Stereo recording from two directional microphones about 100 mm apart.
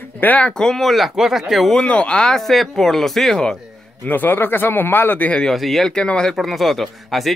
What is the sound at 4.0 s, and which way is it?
Speech, 20° left (ahead or behind).